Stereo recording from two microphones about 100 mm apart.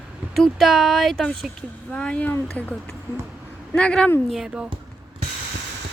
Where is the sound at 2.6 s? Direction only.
5° left (ahead or behind).